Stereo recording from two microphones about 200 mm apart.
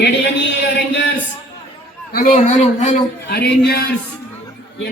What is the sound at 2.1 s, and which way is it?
Speech, 45° left (ahead or behind).